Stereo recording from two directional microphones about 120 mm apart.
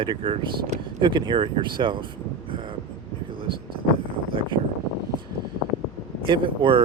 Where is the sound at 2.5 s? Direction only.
45° right (ahead or behind).